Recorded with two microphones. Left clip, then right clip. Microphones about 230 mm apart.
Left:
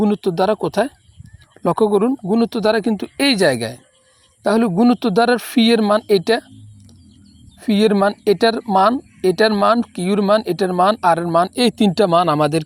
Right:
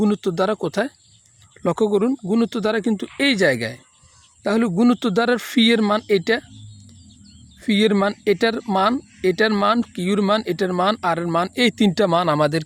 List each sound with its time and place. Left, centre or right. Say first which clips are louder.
0.0 s speech: left 3 dB; centre
7.6 s speech: left 3 dB; centre